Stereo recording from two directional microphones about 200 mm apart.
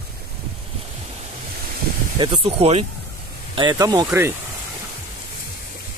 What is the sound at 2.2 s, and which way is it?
Speech, 25° right (ahead or behind).